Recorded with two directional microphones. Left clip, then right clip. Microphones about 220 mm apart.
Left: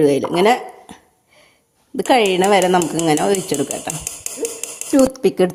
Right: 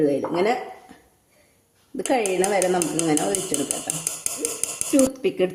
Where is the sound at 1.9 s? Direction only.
35° left (ahead or behind).